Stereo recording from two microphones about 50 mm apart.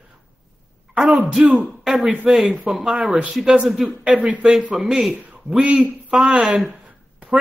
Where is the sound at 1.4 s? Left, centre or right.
Right.